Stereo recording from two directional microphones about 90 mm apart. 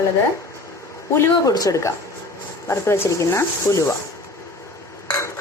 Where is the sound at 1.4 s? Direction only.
40° left (ahead or behind).